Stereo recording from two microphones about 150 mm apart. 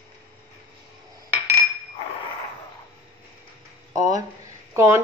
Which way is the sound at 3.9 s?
25° right (ahead or behind).